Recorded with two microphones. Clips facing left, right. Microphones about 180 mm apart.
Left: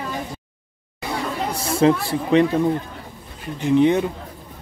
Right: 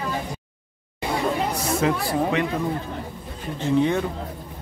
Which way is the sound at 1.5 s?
30° left (ahead or behind).